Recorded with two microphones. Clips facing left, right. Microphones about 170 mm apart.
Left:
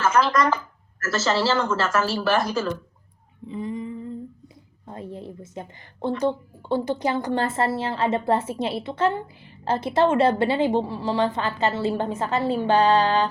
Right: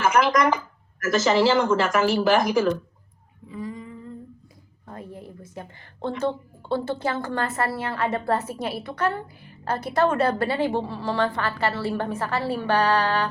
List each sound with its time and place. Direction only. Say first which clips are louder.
0.0 s speech: right 1 dB; 15° right (ahead or behind)
3.5 s a woman's voice: left 4 dB; 25° left (ahead or behind)